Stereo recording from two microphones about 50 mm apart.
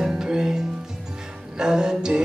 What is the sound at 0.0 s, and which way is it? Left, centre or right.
Music, centre.